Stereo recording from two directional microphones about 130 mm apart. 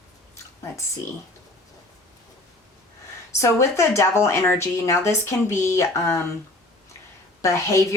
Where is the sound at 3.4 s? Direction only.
20° left (ahead or behind).